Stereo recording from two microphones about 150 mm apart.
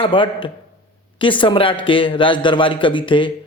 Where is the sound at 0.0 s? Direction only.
35° left (ahead or behind).